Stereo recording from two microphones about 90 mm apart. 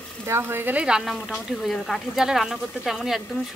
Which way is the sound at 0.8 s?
5° right (ahead or behind).